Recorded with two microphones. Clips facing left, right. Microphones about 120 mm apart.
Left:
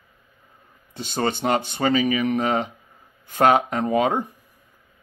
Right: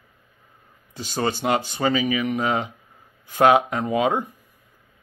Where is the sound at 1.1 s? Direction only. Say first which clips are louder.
Even; 50° left (ahead or behind).